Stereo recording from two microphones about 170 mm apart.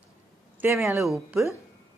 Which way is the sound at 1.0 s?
Centre (ahead or behind).